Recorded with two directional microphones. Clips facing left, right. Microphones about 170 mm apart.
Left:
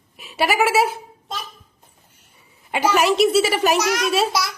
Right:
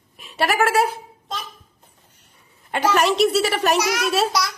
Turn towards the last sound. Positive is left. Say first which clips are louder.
# even
turn(degrees=0)  # may be behind; listen again after turning